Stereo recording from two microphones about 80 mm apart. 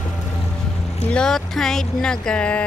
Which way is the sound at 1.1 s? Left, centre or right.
Centre.